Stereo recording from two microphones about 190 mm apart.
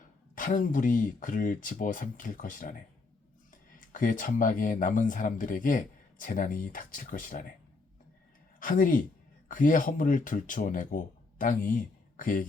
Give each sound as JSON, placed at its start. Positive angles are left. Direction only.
{"t": 0.3, "sound": "speech", "side_deg": 45}
{"t": 8.5, "sound": "speech", "side_deg": 45}